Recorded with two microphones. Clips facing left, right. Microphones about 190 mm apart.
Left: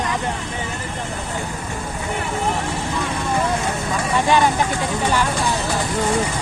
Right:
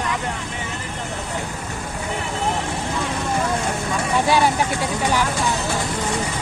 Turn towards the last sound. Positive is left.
turn(degrees=-10)  # may be behind; listen again after turning